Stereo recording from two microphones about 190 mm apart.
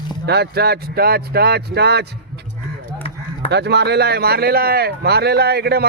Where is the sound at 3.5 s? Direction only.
60° right (ahead or behind).